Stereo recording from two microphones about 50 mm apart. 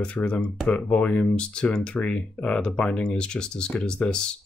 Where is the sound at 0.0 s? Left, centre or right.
Centre.